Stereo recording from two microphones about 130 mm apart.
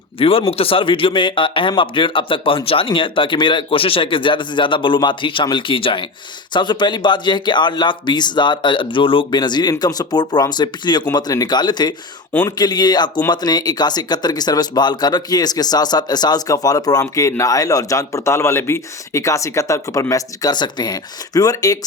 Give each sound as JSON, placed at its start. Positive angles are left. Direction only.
{"t": 0.2, "sound": "a man's voice", "side_deg": 45}